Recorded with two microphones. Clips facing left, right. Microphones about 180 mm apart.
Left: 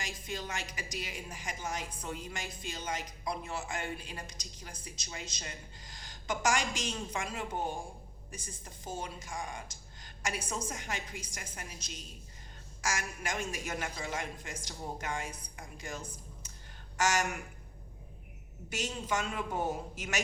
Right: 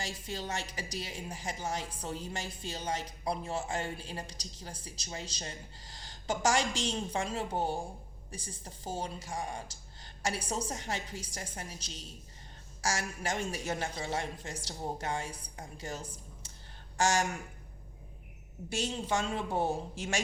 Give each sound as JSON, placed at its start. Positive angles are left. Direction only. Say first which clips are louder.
{"t": 0.0, "sound": "a woman's voice", "louder": "right 2 dB", "side_deg": -35}
{"t": 12.8, "sound": "a woman's voice", "louder": "right 2 dB", "side_deg": -35}
{"t": 18.7, "sound": "a woman's voice", "louder": "right 2 dB", "side_deg": -30}